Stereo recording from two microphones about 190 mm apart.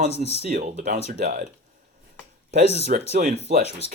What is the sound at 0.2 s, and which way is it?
Speech, 40° right (ahead or behind).